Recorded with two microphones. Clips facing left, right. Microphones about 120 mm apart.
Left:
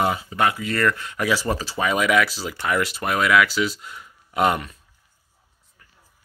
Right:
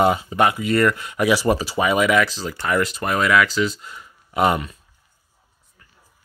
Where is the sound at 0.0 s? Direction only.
25° right (ahead or behind); by 4.7 s centre (ahead or behind).